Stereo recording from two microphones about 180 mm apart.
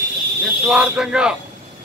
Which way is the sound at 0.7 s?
5° right (ahead or behind).